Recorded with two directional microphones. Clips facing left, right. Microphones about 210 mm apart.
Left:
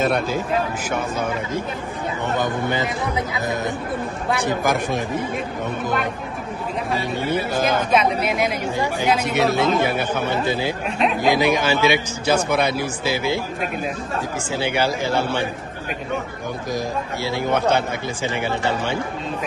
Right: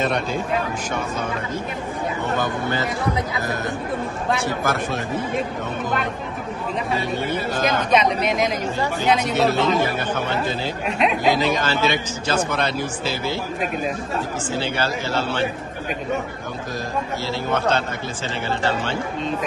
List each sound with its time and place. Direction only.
0.0 s speech: 5° left (ahead or behind)
2.3 s speech: 15° left (ahead or behind)
7.2 s speech: 5° left (ahead or behind)
10.9 s speech: centre (ahead or behind)
11.3 s speech: 10° left (ahead or behind)
14.5 s speech: 15° left (ahead or behind)
17.2 s speech: 15° left (ahead or behind)